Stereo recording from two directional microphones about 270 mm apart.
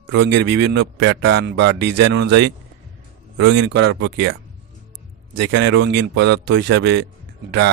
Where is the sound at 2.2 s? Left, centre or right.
Right.